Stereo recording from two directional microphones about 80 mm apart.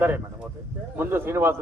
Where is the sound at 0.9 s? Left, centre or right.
Right.